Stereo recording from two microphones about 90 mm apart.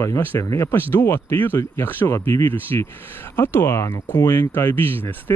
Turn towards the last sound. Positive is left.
turn(degrees=20)  # may be behind; listen again after turning